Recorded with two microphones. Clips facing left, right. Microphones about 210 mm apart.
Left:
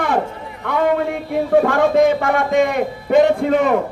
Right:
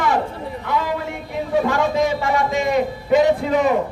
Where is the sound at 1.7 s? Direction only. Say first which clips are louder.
Left 5 dB; 55° left (ahead or behind).